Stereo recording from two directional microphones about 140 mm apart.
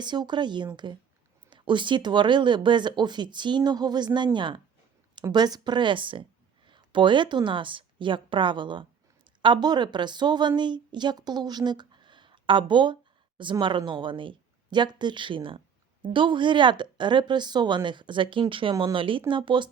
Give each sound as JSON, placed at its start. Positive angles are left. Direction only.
{"t": 0.0, "sound": "a woman's voice", "side_deg": -30}